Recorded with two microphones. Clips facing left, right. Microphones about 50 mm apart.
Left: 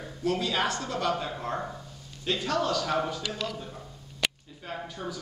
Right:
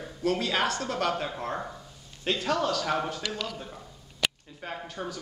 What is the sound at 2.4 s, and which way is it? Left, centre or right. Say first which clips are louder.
Speech: even; centre.